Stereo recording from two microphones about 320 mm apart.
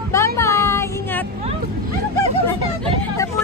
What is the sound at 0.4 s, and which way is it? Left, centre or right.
Child singing, centre.